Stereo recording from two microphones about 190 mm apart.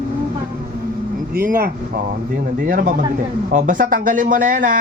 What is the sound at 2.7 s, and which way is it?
Speech, 50° right (ahead or behind).